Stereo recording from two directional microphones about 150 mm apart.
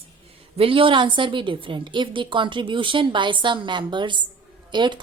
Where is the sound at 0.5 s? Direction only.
35° right (ahead or behind).